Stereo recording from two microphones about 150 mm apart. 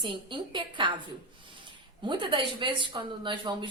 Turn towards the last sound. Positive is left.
turn(degrees=-30)  # may be behind; listen again after turning